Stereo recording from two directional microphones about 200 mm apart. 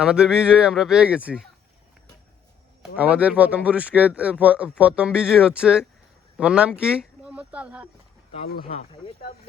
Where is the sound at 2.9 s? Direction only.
5° right (ahead or behind).